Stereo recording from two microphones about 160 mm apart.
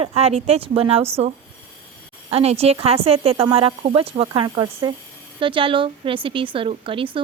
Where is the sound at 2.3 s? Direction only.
40° right (ahead or behind).